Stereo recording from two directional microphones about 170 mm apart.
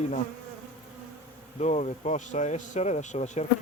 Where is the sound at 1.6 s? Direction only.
40° left (ahead or behind).